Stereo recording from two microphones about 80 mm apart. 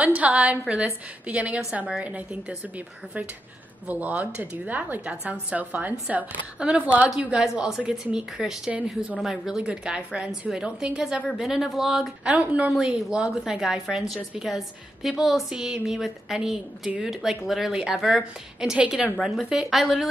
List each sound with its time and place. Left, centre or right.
0.0 s a woman's voice: centre
3.8 s a woman's voice: centre
12.3 s a woman's voice: centre